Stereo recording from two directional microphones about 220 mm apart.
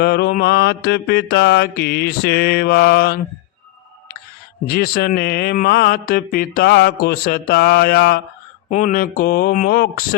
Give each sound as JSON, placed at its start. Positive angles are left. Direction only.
{"t": 0.0, "sound": "mantra", "side_deg": 45}
{"t": 4.6, "sound": "speech", "side_deg": 45}
{"t": 6.6, "sound": "mantra", "side_deg": 45}
{"t": 8.7, "sound": "speech", "side_deg": 35}